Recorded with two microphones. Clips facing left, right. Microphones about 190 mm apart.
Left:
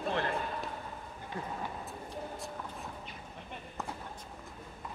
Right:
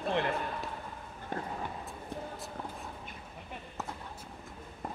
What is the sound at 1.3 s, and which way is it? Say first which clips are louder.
Speech: right 3 dB; 50° right (ahead or behind).